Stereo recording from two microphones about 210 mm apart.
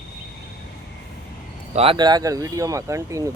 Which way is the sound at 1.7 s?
25° right (ahead or behind).